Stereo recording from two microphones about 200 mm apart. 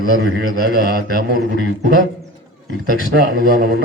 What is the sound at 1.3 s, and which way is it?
Speech, 60° right (ahead or behind).